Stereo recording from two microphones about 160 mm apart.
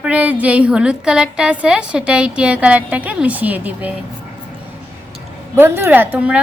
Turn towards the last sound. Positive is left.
turn(degrees=-10)  # may be behind; listen again after turning